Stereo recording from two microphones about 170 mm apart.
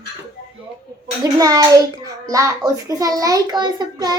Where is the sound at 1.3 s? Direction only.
20° right (ahead or behind).